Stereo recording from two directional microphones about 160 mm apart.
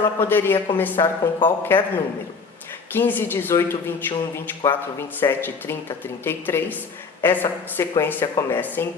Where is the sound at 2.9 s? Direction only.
10° left (ahead or behind).